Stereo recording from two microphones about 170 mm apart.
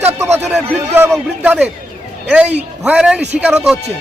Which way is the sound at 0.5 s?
10° right (ahead or behind).